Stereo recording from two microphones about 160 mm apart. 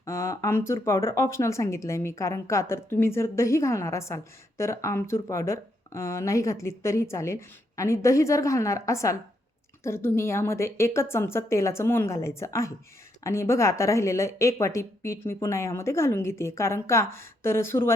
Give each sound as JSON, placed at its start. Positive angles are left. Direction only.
{"t": 0.0, "sound": "speech", "side_deg": 20}